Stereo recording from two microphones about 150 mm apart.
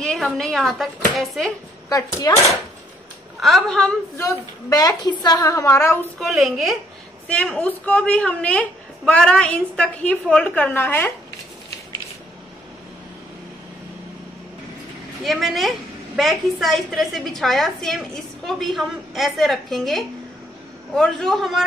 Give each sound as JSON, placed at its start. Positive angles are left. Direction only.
{"t": 0.0, "sound": "a woman's voice", "side_deg": 5}
{"t": 1.9, "sound": "a woman's voice", "side_deg": 25}
{"t": 3.3, "sound": "a woman's voice", "side_deg": 0}
{"t": 4.2, "sound": "a woman's voice", "side_deg": 20}
{"t": 6.1, "sound": "a woman's voice", "side_deg": 0}
{"t": 15.2, "sound": "a woman's voice", "side_deg": 0}